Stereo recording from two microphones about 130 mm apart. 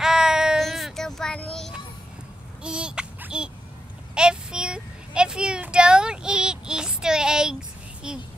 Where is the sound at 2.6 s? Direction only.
5° right (ahead or behind).